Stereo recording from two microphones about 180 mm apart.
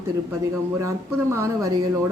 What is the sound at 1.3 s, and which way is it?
Speech, 15° right (ahead or behind).